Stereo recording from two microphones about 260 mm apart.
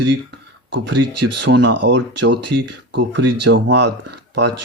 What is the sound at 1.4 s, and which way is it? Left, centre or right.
Speech, right.